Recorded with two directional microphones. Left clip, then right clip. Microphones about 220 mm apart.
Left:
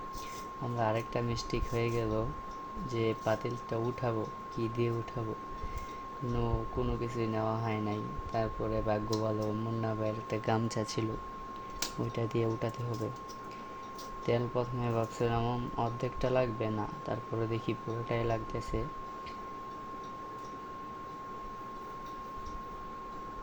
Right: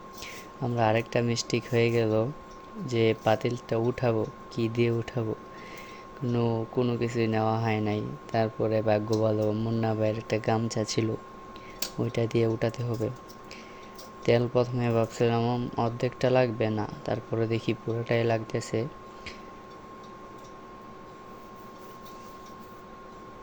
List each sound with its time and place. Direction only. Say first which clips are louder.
0.8 s speech: right 7 dB; 25° right (ahead or behind)
6.3 s speech: right 8 dB; 25° right (ahead or behind)
12.1 s speech: right 8 dB; 20° right (ahead or behind)
14.3 s speech: right 8 dB; 25° right (ahead or behind)